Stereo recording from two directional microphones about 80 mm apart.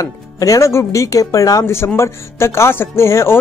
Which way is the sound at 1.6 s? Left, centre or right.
Left.